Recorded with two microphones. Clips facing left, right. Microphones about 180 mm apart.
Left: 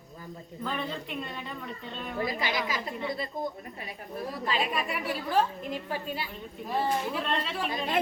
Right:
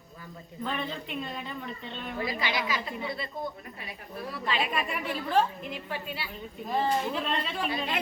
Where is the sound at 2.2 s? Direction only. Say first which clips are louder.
Left 1 dB; 45° left (ahead or behind).